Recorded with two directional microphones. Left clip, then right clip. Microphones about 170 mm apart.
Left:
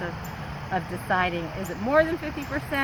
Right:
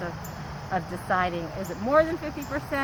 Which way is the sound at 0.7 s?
5° right (ahead or behind).